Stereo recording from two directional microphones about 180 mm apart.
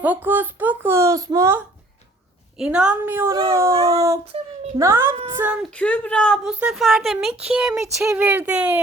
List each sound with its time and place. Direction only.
0.0 s speech: 10° right (ahead or behind)
2.6 s speech: 5° right (ahead or behind)
5.7 s a woman's voice: 5° left (ahead or behind)